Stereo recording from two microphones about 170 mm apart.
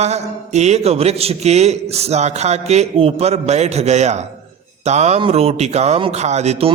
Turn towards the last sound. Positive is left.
turn(degrees=-35)  # may be behind; listen again after turning